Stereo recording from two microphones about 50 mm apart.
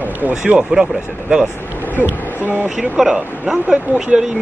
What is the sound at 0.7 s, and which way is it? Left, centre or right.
Speech, right.